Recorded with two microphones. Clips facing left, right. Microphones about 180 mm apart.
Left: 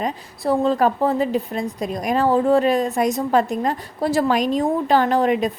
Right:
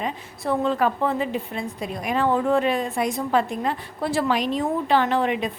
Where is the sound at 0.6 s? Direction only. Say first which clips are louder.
Left 4 dB; 35° left (ahead or behind).